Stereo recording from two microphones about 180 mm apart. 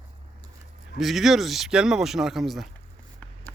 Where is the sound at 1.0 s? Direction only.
Centre (ahead or behind).